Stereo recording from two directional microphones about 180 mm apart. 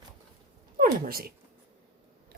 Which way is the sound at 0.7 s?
55° right (ahead or behind).